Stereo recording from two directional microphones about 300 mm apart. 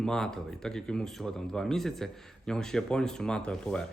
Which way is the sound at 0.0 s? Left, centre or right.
Centre.